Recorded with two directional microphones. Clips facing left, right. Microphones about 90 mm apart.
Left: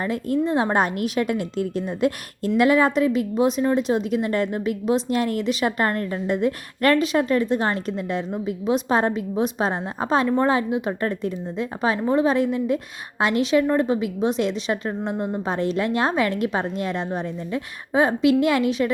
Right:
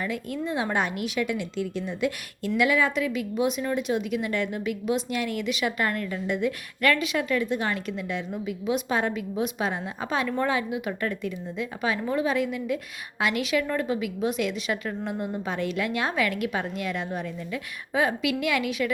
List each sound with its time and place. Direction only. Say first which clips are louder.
0.0 s a woman's voice: left 7 dB; 35° left (ahead or behind)